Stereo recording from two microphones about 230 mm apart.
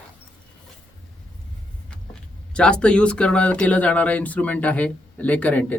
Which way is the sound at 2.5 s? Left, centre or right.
Centre.